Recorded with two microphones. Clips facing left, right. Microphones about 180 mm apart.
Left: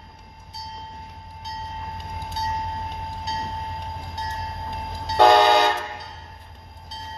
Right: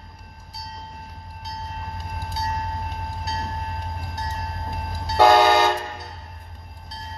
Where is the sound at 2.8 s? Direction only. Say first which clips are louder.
Even; 5° right (ahead or behind).